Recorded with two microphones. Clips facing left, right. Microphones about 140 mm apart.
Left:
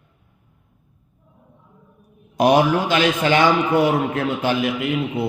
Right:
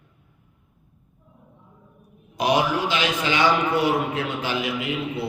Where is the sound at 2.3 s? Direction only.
50° left (ahead or behind).